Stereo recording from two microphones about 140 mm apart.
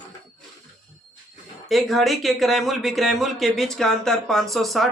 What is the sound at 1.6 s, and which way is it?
Speech, centre (ahead or behind).